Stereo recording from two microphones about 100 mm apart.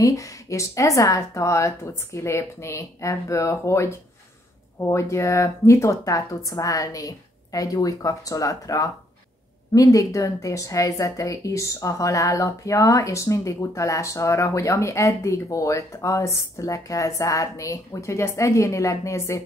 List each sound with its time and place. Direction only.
0.0 s a woman's voice: 30° left (ahead or behind)